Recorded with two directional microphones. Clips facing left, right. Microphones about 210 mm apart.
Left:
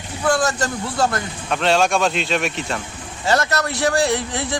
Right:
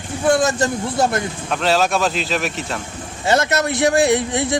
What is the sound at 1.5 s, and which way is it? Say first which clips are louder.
Speech: left 1 dB; centre (ahead or behind).